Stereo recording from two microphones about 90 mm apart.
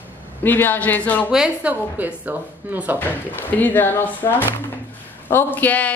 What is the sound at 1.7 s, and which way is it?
A woman's voice, 20° right (ahead or behind).